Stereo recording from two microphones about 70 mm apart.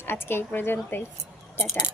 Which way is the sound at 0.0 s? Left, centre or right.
Left.